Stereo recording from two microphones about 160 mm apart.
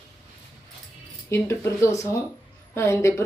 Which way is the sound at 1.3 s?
15° left (ahead or behind).